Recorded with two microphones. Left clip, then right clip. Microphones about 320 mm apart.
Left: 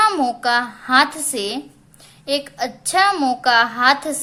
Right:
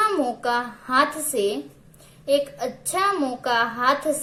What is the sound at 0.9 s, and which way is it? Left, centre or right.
Speech, left.